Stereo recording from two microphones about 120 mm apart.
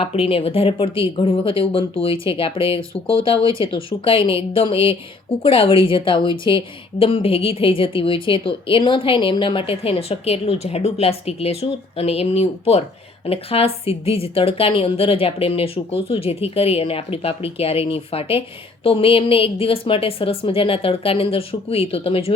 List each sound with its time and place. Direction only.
0.0 s a woman's voice: 50° left (ahead or behind)